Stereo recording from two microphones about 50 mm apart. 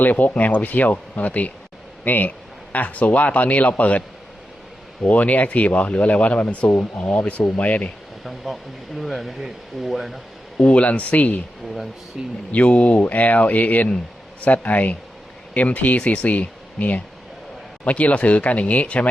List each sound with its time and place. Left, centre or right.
0.0 s speech: left
5.0 s speech: left
8.2 s a sound: centre
9.0 s speech: centre
10.7 s speech: left
12.1 s speech: centre
12.5 s speech: left